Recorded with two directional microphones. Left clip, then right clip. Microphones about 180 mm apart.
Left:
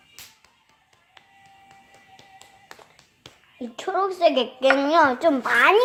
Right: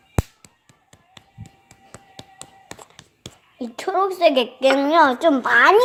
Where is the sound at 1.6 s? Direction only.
45° right (ahead or behind).